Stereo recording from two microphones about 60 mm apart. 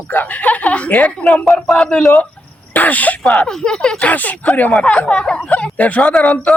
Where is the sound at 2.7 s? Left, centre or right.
Left.